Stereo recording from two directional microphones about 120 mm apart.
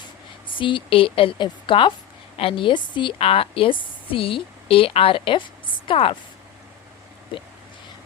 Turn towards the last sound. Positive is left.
turn(degrees=45)  # may be behind; listen again after turning